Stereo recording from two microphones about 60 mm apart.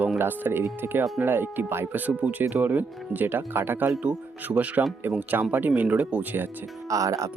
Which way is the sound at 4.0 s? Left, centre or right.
Right.